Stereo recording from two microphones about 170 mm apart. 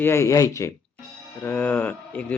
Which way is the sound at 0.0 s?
15° left (ahead or behind).